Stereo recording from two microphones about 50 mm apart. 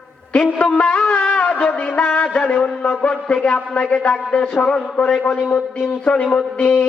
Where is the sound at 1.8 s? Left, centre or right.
Left.